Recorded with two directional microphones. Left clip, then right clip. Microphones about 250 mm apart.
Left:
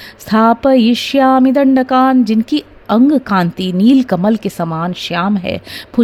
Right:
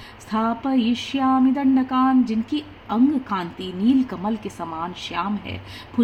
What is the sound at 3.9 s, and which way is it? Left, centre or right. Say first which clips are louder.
Music: left 10 dB; left.